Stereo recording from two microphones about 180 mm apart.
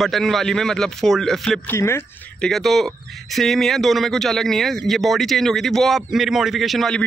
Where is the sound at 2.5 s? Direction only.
Centre (ahead or behind).